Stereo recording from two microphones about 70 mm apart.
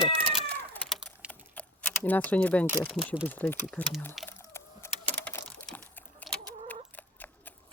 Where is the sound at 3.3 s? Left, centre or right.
Left.